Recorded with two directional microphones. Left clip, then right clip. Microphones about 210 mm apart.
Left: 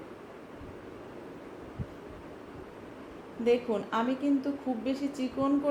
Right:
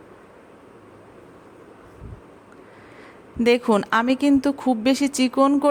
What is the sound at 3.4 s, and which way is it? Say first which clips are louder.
Speech: right 9 dB; 45° right (ahead or behind).